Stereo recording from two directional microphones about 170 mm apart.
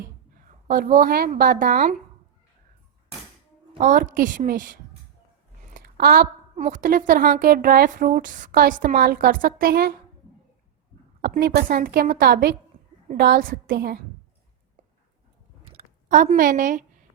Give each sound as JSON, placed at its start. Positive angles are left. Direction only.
{"t": 0.7, "sound": "a woman's voice", "side_deg": -55}
{"t": 3.8, "sound": "a woman's voice", "side_deg": -50}
{"t": 5.7, "sound": "a sound", "side_deg": -65}
{"t": 6.6, "sound": "a woman's voice", "side_deg": -45}
{"t": 11.2, "sound": "a woman's voice", "side_deg": -65}
{"t": 16.0, "sound": "a woman's voice", "side_deg": -45}